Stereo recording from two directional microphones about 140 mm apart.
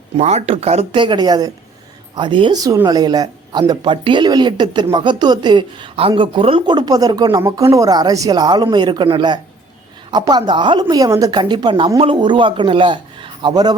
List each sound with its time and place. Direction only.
0.2 s speech: 50° right (ahead or behind)
1.0 s speech: 30° right (ahead or behind)